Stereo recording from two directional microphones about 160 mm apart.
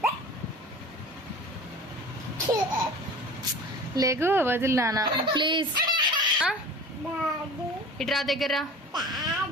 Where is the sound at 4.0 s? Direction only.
15° right (ahead or behind).